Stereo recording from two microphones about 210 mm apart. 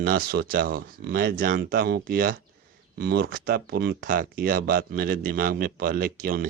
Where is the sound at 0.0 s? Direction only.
45° right (ahead or behind).